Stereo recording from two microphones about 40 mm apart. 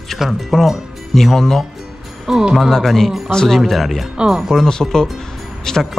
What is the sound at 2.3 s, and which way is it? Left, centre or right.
Speech, centre.